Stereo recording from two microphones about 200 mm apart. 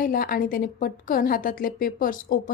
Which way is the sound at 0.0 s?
45° left (ahead or behind).